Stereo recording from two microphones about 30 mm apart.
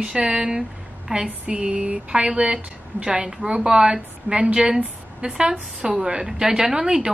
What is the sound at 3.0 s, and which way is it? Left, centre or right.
A woman's voice, right.